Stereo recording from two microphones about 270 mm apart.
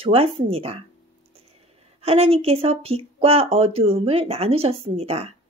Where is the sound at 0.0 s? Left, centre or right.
Right.